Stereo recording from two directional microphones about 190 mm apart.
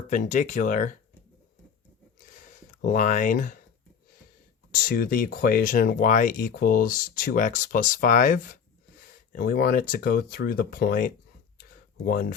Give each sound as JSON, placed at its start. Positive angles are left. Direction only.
{"t": 0.1, "sound": "speech", "side_deg": 40}
{"t": 2.3, "sound": "a sound", "side_deg": 40}
{"t": 4.9, "sound": "speech", "side_deg": 50}